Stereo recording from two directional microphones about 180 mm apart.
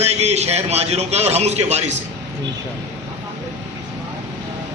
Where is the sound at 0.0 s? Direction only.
35° right (ahead or behind).